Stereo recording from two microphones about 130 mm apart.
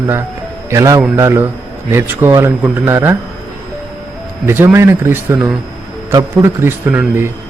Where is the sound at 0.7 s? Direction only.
25° right (ahead or behind).